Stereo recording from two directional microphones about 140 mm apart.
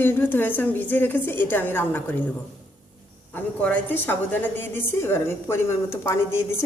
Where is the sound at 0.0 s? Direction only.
15° left (ahead or behind).